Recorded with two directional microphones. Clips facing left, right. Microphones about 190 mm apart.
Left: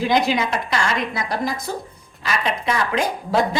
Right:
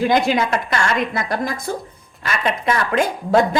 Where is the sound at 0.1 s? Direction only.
55° right (ahead or behind).